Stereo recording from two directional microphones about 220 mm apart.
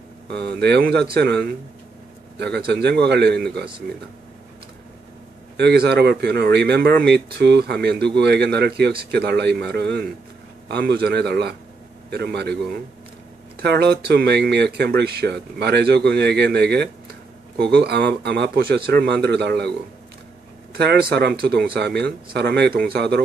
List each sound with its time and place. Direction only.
0.3 s speech: 50° right (ahead or behind)
5.6 s speech: 45° right (ahead or behind)
13.6 s speech: 50° right (ahead or behind)
20.7 s speech: 50° right (ahead or behind)